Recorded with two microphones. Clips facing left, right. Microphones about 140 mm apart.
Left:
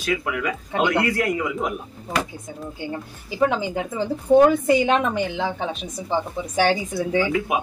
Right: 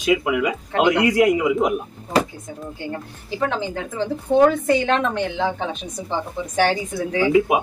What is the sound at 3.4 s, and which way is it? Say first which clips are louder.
A woman's voice: left 3 dB; 10° left (ahead or behind).